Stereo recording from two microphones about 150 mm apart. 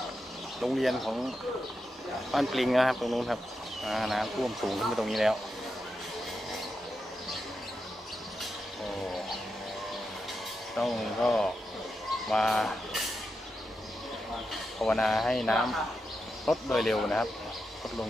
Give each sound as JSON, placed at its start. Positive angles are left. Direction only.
{"t": 0.6, "sound": "speech", "side_deg": 0}
{"t": 2.3, "sound": "speech", "side_deg": 0}
{"t": 10.8, "sound": "speech", "side_deg": 0}
{"t": 14.8, "sound": "speech", "side_deg": 5}